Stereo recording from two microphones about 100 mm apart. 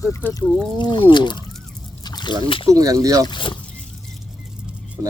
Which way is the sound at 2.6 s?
35° right (ahead or behind).